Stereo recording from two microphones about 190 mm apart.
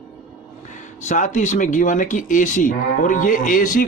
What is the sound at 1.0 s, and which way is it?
Speech, 40° left (ahead or behind).